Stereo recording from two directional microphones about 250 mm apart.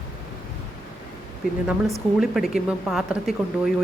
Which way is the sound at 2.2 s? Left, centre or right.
Centre.